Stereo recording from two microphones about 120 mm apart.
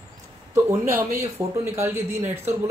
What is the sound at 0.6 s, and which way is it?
Speech, 15° right (ahead or behind).